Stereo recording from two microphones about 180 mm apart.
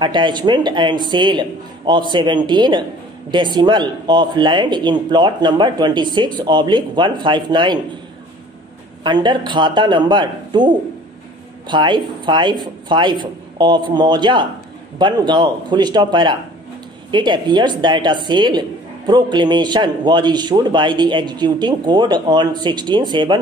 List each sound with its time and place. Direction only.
0.0 s a woman's voice: 25° right (ahead or behind)
9.0 s a woman's voice: 25° right (ahead or behind)
11.7 s a woman's voice: 25° right (ahead or behind)